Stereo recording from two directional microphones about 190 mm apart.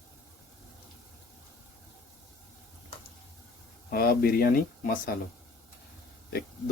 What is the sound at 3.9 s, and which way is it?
Speech, 50° left (ahead or behind).